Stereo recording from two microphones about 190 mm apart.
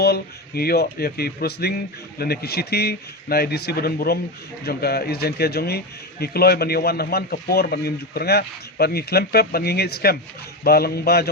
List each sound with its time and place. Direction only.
0.0 s a man's voice: 55° left (ahead or behind)